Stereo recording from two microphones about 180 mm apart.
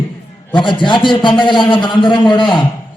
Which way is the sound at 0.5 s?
25° left (ahead or behind).